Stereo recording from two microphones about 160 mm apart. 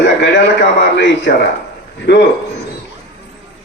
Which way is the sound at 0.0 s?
90° left.